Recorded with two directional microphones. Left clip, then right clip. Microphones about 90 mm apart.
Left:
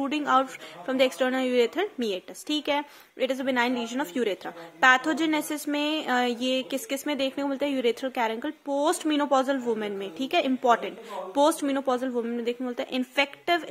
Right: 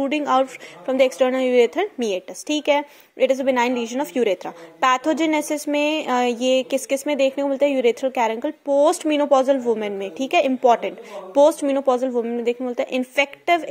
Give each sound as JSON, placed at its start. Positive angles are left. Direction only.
{"t": 0.0, "sound": "speech", "side_deg": -25}